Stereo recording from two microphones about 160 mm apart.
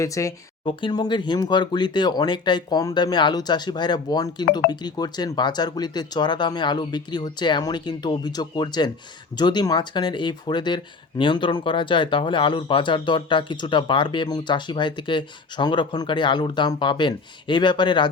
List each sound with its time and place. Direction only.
0.0 s speech: 20° left (ahead or behind)